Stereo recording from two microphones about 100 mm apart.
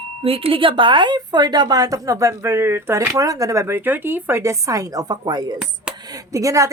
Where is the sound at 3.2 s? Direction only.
35° right (ahead or behind).